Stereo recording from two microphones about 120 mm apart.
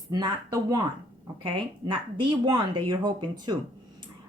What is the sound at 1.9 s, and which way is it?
Speech, 40° right (ahead or behind).